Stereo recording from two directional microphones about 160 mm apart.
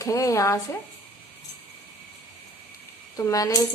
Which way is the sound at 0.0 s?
20° left (ahead or behind).